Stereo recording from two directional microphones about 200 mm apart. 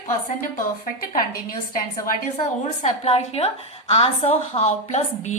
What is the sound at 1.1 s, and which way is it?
A woman's voice, 45° left (ahead or behind).